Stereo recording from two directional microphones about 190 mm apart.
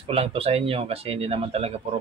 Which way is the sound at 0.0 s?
30° right (ahead or behind).